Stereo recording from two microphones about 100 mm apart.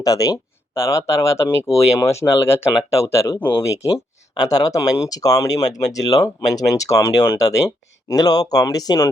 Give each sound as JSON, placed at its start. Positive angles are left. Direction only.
{"t": 0.0, "sound": "speech", "side_deg": 40}